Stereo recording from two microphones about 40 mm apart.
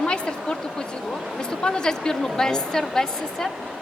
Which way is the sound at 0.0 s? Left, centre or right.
Left.